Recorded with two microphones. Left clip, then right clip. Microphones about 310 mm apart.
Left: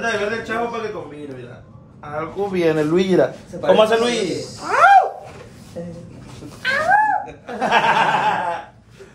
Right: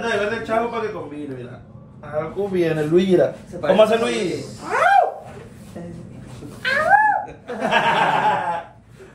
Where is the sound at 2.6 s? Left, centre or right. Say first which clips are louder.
Left 2 dB; left.